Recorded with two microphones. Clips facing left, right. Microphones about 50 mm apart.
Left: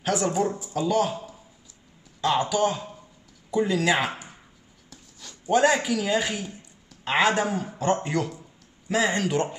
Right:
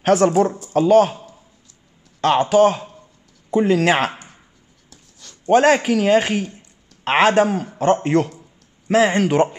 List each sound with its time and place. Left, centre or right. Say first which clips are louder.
0.0 s speech: right 9 dB; right
2.5 s speech: right 10 dB; right
4.1 s a sound: even; centre
4.8 s writing: left 1 dB; centre
5.4 s speech: right 7 dB; right